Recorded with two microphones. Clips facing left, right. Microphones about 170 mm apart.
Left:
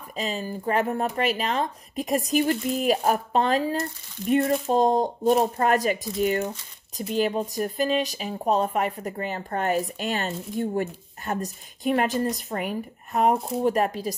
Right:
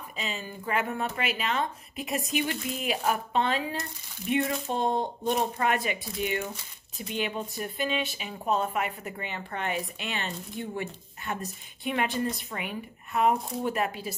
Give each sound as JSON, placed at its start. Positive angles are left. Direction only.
{"t": 0.1, "sound": "speech", "side_deg": 40}